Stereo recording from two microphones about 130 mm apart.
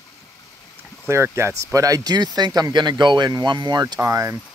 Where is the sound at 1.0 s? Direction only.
20° right (ahead or behind).